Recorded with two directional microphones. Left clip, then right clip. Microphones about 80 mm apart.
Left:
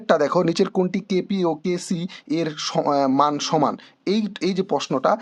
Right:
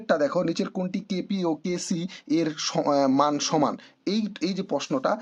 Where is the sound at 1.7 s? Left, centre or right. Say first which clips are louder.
Left 4 dB; left.